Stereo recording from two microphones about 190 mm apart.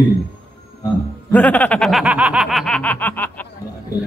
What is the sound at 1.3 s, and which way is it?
Snicker, 5° left (ahead or behind).